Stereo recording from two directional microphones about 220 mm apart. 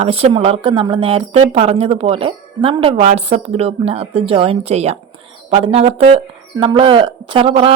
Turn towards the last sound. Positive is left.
turn(degrees=-25)  # may be behind; listen again after turning